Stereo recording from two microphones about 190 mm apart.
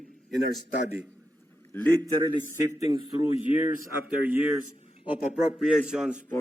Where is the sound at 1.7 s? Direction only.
10° left (ahead or behind).